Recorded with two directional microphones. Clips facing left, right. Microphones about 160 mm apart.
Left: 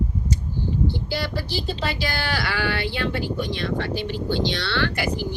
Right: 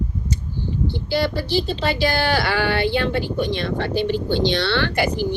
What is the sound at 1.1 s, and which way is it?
Speech, 25° right (ahead or behind).